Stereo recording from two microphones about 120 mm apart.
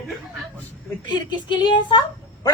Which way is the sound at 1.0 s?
40° left (ahead or behind).